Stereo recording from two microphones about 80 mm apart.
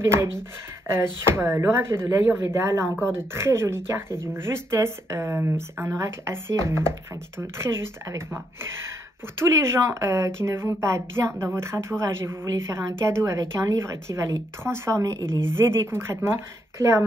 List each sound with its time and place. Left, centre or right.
0.0 s speech: right
9.4 s speech: right
14.6 s speech: right